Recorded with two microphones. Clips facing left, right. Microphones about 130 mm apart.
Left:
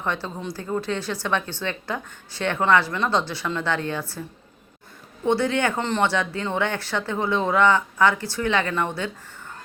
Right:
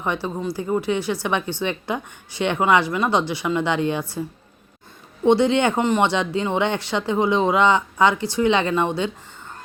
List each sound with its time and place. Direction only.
0.0 s speech: 15° right (ahead or behind)
5.2 s speech: 20° right (ahead or behind)